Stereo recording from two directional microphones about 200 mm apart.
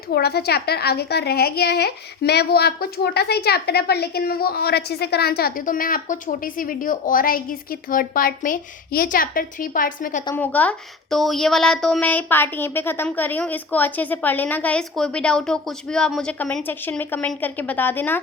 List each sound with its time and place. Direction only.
0.1 s a woman's voice: 50° left (ahead or behind)
10.3 s a woman's voice: 10° left (ahead or behind)